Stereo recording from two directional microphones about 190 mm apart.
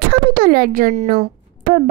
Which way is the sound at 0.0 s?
55° right (ahead or behind).